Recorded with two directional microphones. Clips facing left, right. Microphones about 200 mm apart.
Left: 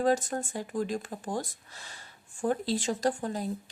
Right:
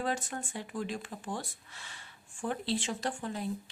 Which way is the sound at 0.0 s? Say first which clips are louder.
Left 8 dB; 40° left (ahead or behind).